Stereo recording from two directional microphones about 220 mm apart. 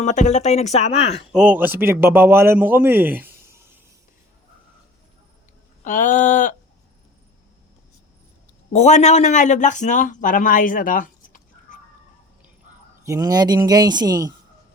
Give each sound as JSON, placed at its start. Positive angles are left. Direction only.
{"t": 0.0, "sound": "speech", "side_deg": 35}
{"t": 1.3, "sound": "a man's voice", "side_deg": -5}
{"t": 5.8, "sound": "a sound", "side_deg": 35}
{"t": 8.7, "sound": "speech", "side_deg": 30}
{"t": 13.1, "sound": "a man's voice", "side_deg": -15}